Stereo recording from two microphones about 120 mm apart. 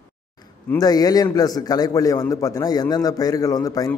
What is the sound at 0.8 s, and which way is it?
A man's voice, 30° left (ahead or behind).